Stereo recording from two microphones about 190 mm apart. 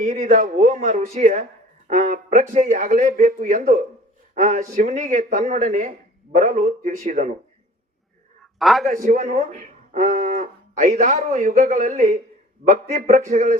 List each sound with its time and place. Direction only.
0.0 s speech: 40° right (ahead or behind)
8.5 s a man's voice: centre (ahead or behind)
9.0 s speech: 45° right (ahead or behind)